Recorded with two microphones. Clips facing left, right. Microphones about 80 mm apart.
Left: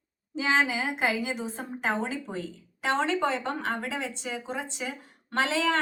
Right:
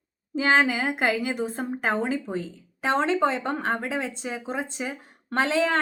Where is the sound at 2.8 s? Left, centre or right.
Right.